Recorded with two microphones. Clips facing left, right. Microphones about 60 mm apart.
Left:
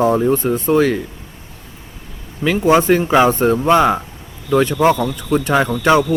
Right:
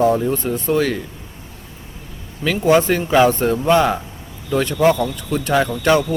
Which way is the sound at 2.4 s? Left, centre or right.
Centre.